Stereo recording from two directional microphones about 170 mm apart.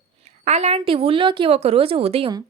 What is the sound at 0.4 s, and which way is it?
A woman's voice, 40° right (ahead or behind).